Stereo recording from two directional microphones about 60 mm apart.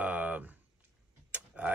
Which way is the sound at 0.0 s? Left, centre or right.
Right.